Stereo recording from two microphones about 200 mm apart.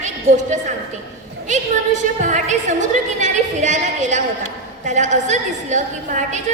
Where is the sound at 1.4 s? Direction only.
35° right (ahead or behind).